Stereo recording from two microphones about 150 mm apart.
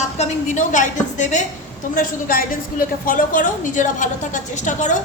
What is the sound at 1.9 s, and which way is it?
A woman's voice, 70° left (ahead or behind).